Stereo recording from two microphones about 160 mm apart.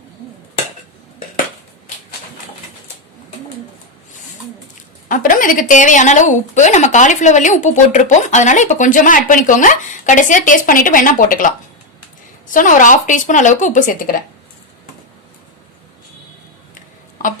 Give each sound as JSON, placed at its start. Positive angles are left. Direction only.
{"t": 5.0, "sound": "a woman's voice", "side_deg": 55}